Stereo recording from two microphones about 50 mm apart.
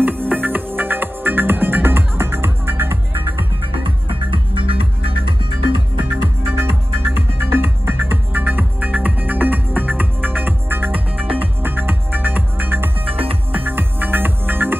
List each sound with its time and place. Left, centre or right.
0.0 s music: right
6.2 s music: right